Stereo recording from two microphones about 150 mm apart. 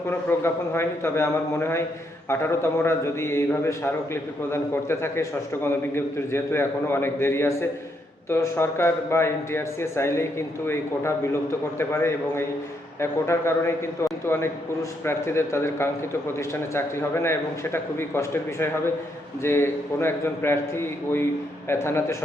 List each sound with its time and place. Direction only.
0.1 s a man's voice: 15° left (ahead or behind)